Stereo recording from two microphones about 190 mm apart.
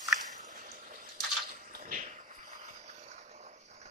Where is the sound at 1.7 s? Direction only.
45° right (ahead or behind).